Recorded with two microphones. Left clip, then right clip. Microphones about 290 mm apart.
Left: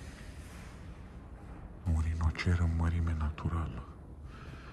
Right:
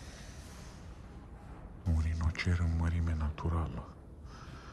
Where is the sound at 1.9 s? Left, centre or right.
Centre.